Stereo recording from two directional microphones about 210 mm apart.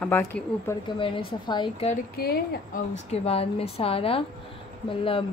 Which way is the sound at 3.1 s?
30° left (ahead or behind).